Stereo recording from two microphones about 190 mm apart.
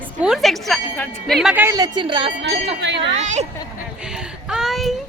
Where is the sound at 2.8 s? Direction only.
65° right (ahead or behind).